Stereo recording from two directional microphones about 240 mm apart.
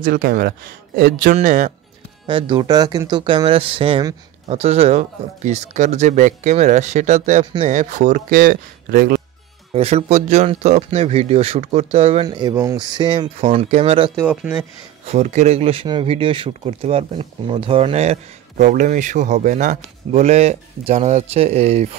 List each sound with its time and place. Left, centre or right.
0.0 s speech: right
2.2 s speech: right
9.8 s speech: right
14.2 s speech: centre
15.0 s speech: right